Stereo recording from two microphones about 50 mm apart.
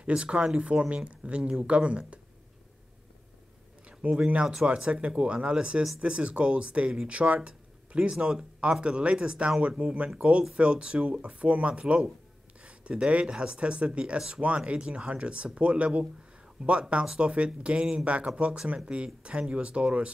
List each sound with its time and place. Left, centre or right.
0.0 s speech: right
4.3 s speech: right